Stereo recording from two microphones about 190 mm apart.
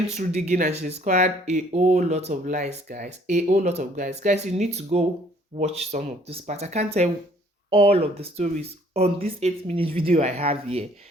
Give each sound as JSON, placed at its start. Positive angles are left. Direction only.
{"t": 0.2, "sound": "speech", "side_deg": -45}